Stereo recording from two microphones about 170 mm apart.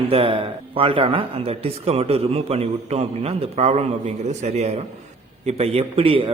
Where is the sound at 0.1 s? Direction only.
30° right (ahead or behind).